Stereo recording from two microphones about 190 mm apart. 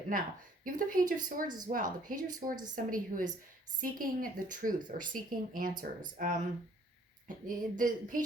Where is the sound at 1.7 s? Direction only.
45° right (ahead or behind).